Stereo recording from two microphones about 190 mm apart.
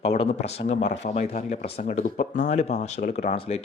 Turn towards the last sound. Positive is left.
turn(degrees=35)  # may be behind; listen again after turning